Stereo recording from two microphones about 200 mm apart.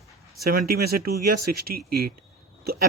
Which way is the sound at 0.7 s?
50° right (ahead or behind).